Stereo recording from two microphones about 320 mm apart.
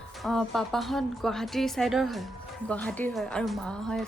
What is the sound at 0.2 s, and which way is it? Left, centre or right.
A woman's voice, centre.